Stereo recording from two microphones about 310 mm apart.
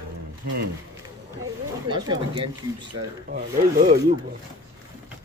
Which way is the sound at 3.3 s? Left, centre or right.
Right.